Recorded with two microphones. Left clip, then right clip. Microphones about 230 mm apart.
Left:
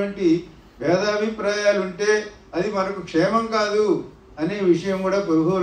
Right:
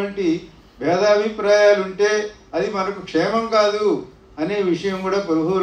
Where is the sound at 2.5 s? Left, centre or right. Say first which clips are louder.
Right 1 dB; right.